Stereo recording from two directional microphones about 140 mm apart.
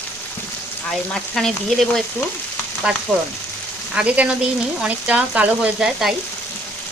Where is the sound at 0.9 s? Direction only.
5° left (ahead or behind).